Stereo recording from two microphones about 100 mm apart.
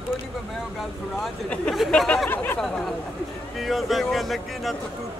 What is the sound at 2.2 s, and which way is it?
Speech, 20° left (ahead or behind).